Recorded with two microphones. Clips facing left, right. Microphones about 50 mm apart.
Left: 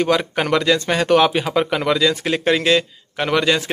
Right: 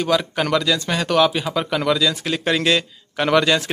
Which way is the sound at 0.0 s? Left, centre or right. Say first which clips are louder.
Left 2 dB; left.